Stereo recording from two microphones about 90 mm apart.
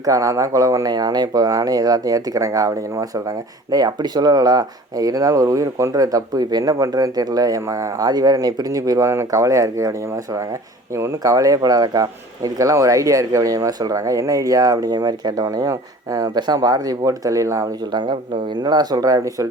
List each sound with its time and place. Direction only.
0.0 s speech: 40° right (ahead or behind)
10.9 s speech: 35° right (ahead or behind)
17.9 s speech: 60° right (ahead or behind); by 19.5 s 40° right (ahead or behind)